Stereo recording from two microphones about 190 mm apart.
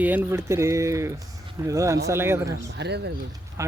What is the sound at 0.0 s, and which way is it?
Speech, 10° right (ahead or behind).